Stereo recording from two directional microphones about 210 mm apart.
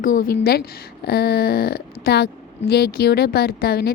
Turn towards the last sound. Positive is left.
turn(degrees=50)  # may be behind; listen again after turning